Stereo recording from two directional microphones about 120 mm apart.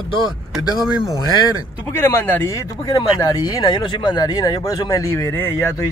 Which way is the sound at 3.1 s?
30° left (ahead or behind).